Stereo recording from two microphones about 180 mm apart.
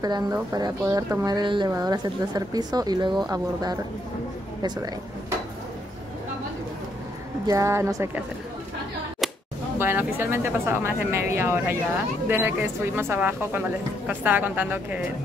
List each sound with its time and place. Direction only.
0.0 s speech: 20° right (ahead or behind)
7.4 s a woman's voice: 15° right (ahead or behind)
9.8 s a woman's voice: 10° right (ahead or behind)